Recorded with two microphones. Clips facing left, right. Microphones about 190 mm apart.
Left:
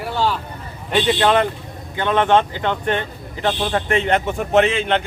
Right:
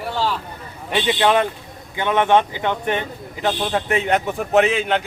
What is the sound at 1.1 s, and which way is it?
A man's voice, 10° right (ahead or behind).